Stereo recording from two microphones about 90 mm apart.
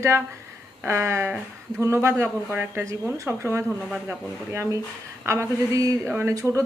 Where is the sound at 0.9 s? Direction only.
30° right (ahead or behind).